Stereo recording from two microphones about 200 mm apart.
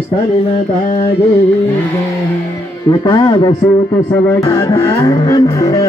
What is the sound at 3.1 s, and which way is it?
Speech, 25° left (ahead or behind).